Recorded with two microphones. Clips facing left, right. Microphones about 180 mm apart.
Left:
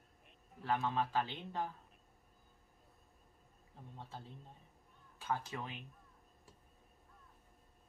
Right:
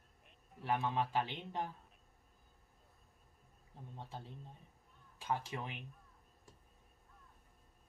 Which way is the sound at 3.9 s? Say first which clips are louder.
Right 2 dB; 15° right (ahead or behind).